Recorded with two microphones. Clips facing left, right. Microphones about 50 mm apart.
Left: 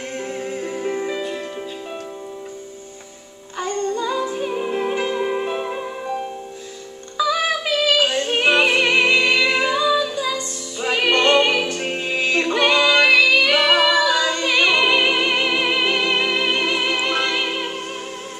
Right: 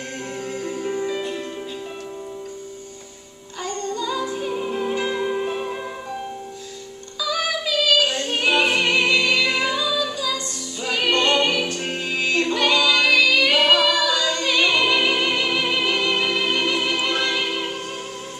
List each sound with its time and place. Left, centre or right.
0.4 s music: left
3.6 s music: left
7.2 s music: left